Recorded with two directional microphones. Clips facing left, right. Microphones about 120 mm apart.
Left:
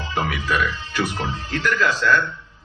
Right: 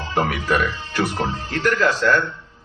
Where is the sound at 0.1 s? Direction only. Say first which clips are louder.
Right 3 dB; 45° right (ahead or behind).